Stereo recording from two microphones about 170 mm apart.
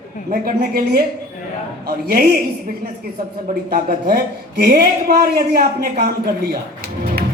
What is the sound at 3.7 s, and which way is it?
A man's voice, 65° right (ahead or behind).